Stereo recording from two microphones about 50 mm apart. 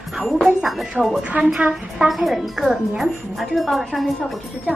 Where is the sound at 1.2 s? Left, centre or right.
Right.